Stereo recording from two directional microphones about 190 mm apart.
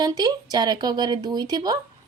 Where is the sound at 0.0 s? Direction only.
20° right (ahead or behind).